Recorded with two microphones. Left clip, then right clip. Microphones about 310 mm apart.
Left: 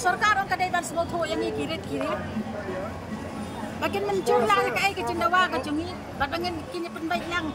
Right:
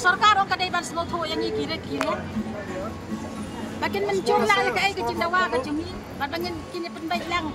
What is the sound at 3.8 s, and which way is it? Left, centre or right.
Speech, centre.